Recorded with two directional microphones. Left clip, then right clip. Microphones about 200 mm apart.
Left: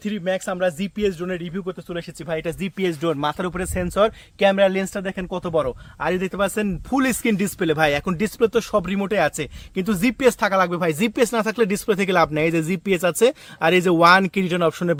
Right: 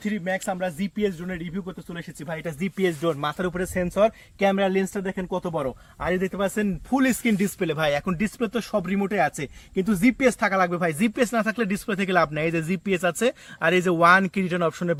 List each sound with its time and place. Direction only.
0.0 s speech: 15° left (ahead or behind); by 14.9 s 50° left (ahead or behind)